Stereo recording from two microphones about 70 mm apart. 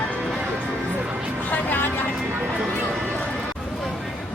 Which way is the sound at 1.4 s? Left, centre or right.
Left.